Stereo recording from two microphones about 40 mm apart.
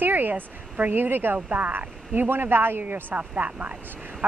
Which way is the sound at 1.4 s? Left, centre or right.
Right.